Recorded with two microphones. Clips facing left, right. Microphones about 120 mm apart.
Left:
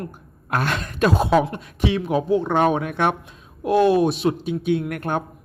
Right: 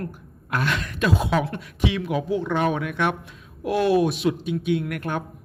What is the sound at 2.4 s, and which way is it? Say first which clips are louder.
Speech: left 4 dB; 50° left (ahead or behind).